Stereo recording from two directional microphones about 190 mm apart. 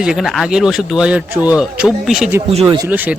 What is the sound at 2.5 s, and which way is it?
Speech, 35° right (ahead or behind).